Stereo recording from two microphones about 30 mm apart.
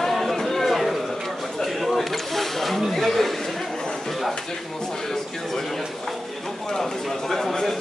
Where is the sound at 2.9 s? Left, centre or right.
Centre.